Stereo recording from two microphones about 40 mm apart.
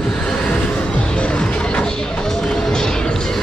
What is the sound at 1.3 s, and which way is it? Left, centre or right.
Music, left.